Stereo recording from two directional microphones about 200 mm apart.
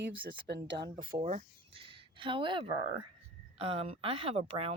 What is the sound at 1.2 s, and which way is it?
Speech, 35° right (ahead or behind).